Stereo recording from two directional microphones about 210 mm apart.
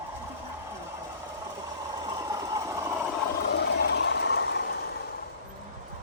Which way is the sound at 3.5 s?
55° left (ahead or behind).